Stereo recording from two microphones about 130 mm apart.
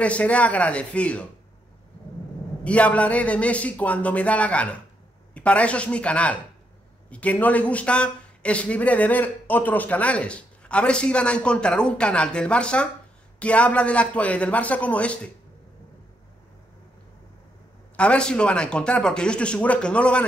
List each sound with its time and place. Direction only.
0.0 s speech: 10° left (ahead or behind)
2.6 s speech: 10° left (ahead or behind)
17.9 s speech: 10° left (ahead or behind)